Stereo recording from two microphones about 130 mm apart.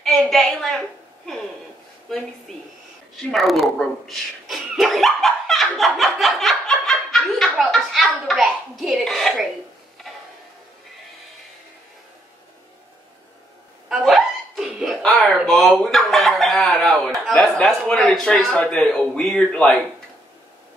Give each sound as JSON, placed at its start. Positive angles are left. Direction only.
{"t": 0.0, "sound": "a woman's voice", "side_deg": 0}
{"t": 2.5, "sound": "a man's voice", "side_deg": 5}
{"t": 10.1, "sound": "music", "side_deg": 5}
{"t": 13.8, "sound": "laughter", "side_deg": 0}
{"t": 15.0, "sound": "a sound", "side_deg": 10}
{"t": 15.3, "sound": "chicken", "side_deg": 0}
{"t": 17.3, "sound": "a man's voice", "side_deg": 5}